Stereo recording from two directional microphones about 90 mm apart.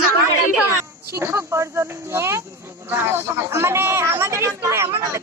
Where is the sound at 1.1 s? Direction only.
30° right (ahead or behind).